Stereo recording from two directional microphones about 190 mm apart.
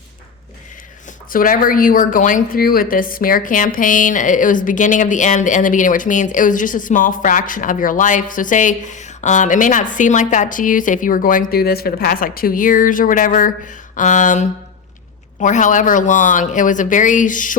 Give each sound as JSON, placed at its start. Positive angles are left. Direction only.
{"t": 1.3, "sound": "a woman's voice", "side_deg": 45}